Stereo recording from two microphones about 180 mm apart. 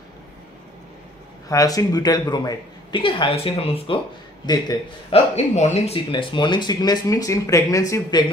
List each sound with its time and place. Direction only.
1.5 s speech: 20° left (ahead or behind)
5.1 s speech: 35° left (ahead or behind)